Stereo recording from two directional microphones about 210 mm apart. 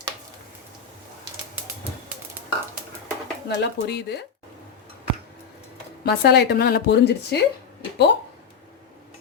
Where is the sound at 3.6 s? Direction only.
50° left (ahead or behind).